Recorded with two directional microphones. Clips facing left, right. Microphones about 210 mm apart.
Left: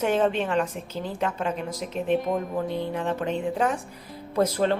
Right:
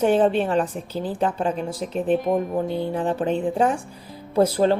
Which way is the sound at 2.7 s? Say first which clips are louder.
Right 4 dB; 35° right (ahead or behind).